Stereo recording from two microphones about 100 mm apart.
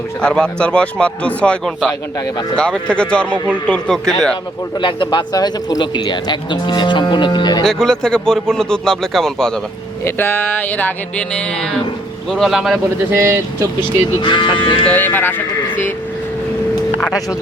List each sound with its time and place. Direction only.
0.2 s music: 10° left (ahead or behind)
3.3 s speech: 20° right (ahead or behind)
3.7 s speech: 5° left (ahead or behind)
4.8 s speech: 50° left (ahead or behind)
7.6 s speech: 5° left (ahead or behind)
10.0 s music: 25° left (ahead or behind); by 11.7 s 10° left (ahead or behind)
12.3 s speech: centre (ahead or behind)
13.1 s speech: 25° right (ahead or behind)
13.7 s speech: 55° left (ahead or behind)
14.8 s speech: 20° left (ahead or behind)